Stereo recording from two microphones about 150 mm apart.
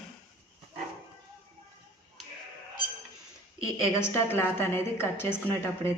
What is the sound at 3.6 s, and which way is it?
A woman's voice, 20° left (ahead or behind).